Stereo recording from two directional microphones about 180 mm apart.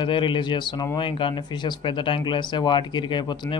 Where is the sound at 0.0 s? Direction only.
25° left (ahead or behind).